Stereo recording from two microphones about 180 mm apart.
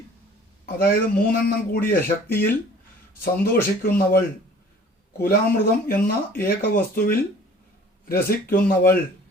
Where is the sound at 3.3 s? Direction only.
55° left (ahead or behind).